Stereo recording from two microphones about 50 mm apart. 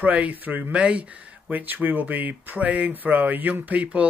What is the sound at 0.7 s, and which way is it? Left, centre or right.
Speech, right.